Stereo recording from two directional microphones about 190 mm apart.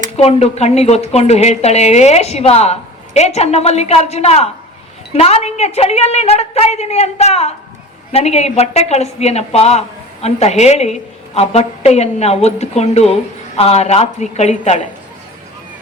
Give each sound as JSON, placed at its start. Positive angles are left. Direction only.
{"t": 0.2, "sound": "a woman's voice", "side_deg": 35}